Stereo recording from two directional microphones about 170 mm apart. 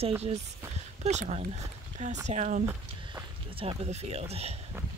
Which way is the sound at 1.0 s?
40° right (ahead or behind).